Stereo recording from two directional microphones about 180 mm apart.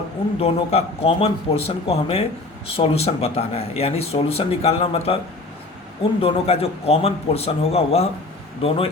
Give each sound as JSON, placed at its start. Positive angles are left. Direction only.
{"t": 0.3, "sound": "speech", "side_deg": 35}
{"t": 6.2, "sound": "speech", "side_deg": 35}